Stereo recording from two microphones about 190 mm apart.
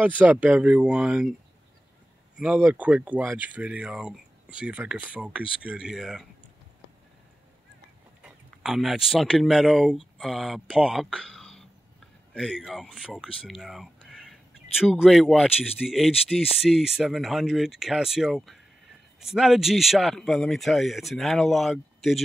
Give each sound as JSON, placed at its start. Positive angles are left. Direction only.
{"t": 0.2, "sound": "speech", "side_deg": -5}
{"t": 2.3, "sound": "speech", "side_deg": -5}
{"t": 8.2, "sound": "speech", "side_deg": 0}